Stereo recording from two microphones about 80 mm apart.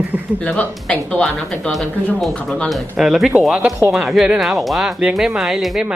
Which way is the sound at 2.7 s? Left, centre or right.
Centre.